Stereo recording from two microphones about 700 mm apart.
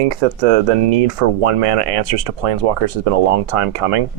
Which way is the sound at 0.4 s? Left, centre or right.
Right.